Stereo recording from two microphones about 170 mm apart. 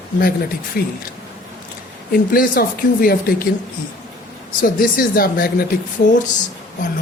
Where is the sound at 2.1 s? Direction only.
60° left (ahead or behind).